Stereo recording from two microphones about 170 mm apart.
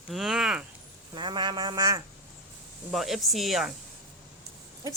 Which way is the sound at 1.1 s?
25° right (ahead or behind).